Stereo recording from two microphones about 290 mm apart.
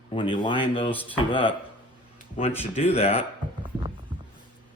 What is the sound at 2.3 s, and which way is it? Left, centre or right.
Speech, left.